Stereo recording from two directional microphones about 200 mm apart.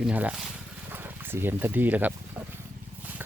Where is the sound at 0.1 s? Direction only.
5° right (ahead or behind).